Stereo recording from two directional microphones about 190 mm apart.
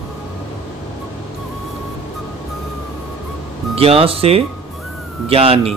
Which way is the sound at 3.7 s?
30° right (ahead or behind).